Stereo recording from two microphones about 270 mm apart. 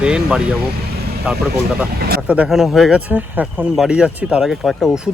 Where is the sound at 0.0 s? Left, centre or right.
Centre.